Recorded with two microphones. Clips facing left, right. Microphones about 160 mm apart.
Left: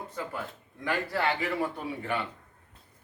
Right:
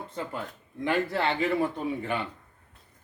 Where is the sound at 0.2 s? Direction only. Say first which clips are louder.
Right 2 dB; 25° right (ahead or behind).